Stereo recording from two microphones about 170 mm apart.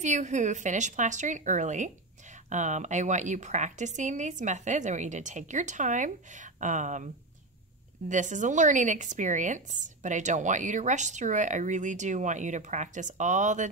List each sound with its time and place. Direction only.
0.0 s a woman's voice: 45° right (ahead or behind)
8.1 s a woman's voice: 45° right (ahead or behind)